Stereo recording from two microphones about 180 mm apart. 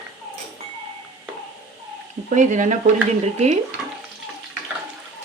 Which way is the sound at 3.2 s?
40° right (ahead or behind).